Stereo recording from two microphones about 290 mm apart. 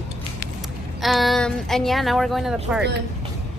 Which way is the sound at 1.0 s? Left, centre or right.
Centre.